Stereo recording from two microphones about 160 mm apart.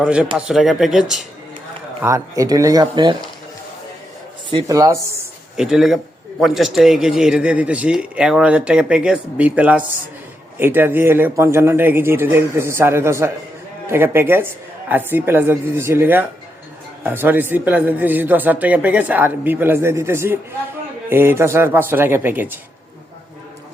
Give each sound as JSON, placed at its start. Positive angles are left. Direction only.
{"t": 0.0, "sound": "a man's voice", "side_deg": -5}
{"t": 2.0, "sound": "speech", "side_deg": -20}
{"t": 4.4, "sound": "speech", "side_deg": -30}
{"t": 4.8, "sound": "speech", "side_deg": -20}
{"t": 5.5, "sound": "a man's voice", "side_deg": -5}